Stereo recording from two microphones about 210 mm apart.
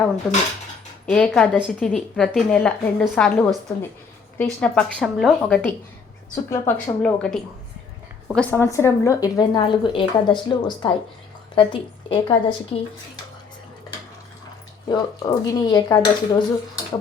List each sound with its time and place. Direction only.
0.2 s a woman's voice: centre (ahead or behind)
6.3 s speech: 15° left (ahead or behind)
8.4 s speech: 10° left (ahead or behind)
14.8 s speech: 20° left (ahead or behind)